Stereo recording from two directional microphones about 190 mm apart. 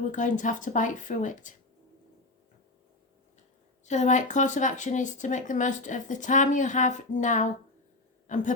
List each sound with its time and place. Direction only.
0.1 s speech: 40° left (ahead or behind)
3.8 s speech: 40° left (ahead or behind)
8.3 s a sound: 40° left (ahead or behind)